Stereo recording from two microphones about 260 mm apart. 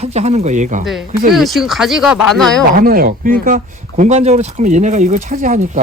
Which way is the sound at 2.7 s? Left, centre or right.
Right.